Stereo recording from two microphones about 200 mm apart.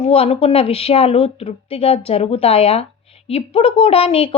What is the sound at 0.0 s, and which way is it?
A woman's voice, 30° left (ahead or behind).